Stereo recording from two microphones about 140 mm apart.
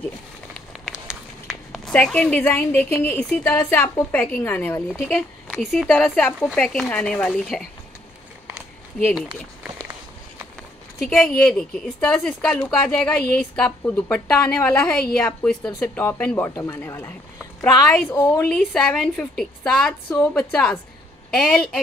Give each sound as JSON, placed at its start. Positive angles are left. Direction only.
{"t": 1.0, "sound": "a sound", "side_deg": -5}
{"t": 2.0, "sound": "a woman's voice", "side_deg": 0}
{"t": 2.3, "sound": "speech", "side_deg": 15}
{"t": 5.5, "sound": "a woman's voice", "side_deg": 0}
{"t": 9.1, "sound": "a woman's voice", "side_deg": -5}
{"t": 11.0, "sound": "a woman's voice", "side_deg": 0}
{"t": 15.8, "sound": "a woman's voice", "side_deg": 15}